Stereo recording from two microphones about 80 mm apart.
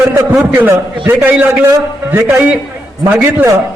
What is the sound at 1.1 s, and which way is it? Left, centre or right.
A man's voice, centre.